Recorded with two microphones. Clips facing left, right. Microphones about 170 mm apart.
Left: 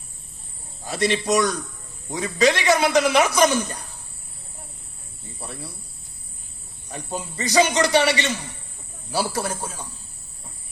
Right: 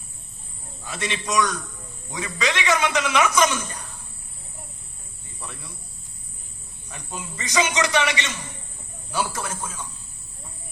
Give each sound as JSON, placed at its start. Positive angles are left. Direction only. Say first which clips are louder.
{"t": 0.9, "sound": "a man's voice", "louder": "left 7 dB", "side_deg": 40}
{"t": 5.4, "sound": "a man's voice", "louder": "left 4 dB", "side_deg": 35}
{"t": 6.9, "sound": "a man's voice", "louder": "left 5 dB", "side_deg": 35}